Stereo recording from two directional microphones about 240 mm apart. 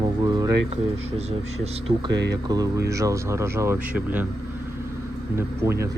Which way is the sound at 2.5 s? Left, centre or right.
Centre.